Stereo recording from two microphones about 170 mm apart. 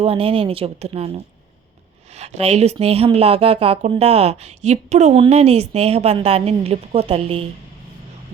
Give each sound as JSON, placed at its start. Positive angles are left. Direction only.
{"t": 0.0, "sound": "speech", "side_deg": -35}
{"t": 2.1, "sound": "speech", "side_deg": -40}